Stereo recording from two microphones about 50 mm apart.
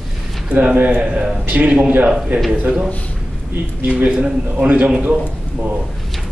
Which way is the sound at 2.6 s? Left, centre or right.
Centre.